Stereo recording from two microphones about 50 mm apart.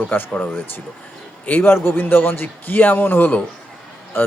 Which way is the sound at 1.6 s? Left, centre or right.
Left.